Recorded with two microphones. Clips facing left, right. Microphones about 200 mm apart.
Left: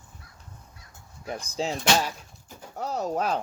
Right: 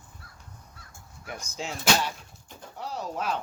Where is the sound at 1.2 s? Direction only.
30° left (ahead or behind).